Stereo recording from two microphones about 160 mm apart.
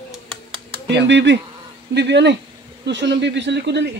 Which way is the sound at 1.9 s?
90° right.